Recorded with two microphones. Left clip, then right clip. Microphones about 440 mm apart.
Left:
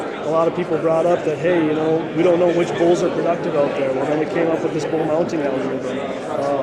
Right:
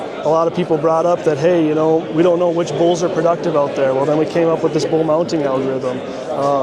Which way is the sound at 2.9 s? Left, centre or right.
Right.